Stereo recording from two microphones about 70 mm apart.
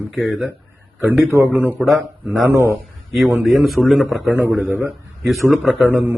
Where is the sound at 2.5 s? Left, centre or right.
Right.